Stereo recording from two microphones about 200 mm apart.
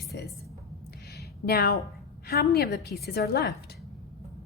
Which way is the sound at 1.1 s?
55° left (ahead or behind).